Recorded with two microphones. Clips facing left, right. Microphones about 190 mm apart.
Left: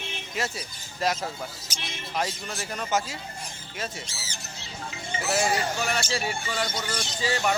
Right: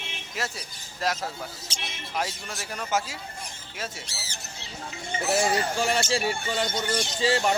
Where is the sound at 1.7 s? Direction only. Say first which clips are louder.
Right 1 dB; 25° right (ahead or behind).